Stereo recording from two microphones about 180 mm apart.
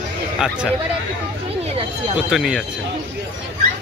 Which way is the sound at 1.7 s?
35° right (ahead or behind).